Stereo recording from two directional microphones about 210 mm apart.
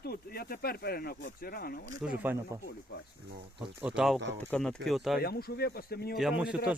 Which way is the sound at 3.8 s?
5° right (ahead or behind).